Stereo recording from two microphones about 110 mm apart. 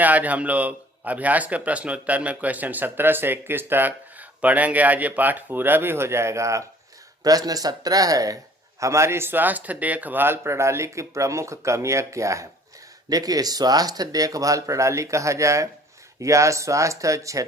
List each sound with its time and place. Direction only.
0.0 s a man's voice: 15° right (ahead or behind); by 17.4 s 30° right (ahead or behind)